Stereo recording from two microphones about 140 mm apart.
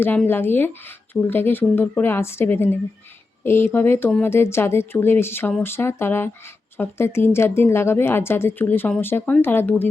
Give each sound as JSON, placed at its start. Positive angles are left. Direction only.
{"t": 0.3, "sound": "a woman's voice", "side_deg": 15}